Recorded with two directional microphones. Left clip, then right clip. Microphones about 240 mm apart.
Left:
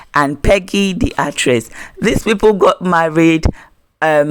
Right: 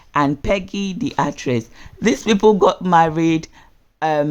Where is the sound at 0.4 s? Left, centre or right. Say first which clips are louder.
Left 8 dB; left.